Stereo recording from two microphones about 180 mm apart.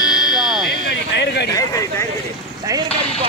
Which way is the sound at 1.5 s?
20° left (ahead or behind).